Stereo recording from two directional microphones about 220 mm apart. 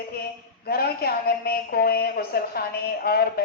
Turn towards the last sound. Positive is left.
turn(degrees=45)  # may be behind; listen again after turning